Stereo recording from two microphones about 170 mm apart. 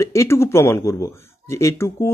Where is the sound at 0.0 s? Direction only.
15° left (ahead or behind).